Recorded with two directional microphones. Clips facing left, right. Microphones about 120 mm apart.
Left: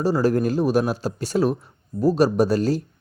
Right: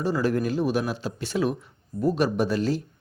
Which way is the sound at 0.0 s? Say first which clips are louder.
Left 4 dB; 35° left (ahead or behind).